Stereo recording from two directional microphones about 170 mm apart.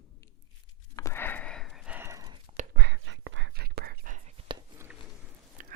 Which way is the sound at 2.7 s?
80° right.